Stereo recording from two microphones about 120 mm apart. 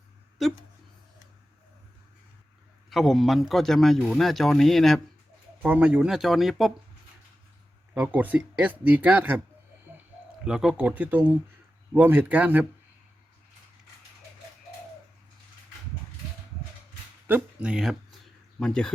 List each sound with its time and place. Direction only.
2.9 s speech: centre (ahead or behind)
5.6 s speech: 10° right (ahead or behind)
7.9 s speech: 15° right (ahead or behind)
10.4 s speech: 5° right (ahead or behind)
17.2 s speech: 10° right (ahead or behind)
18.6 s speech: 5° left (ahead or behind)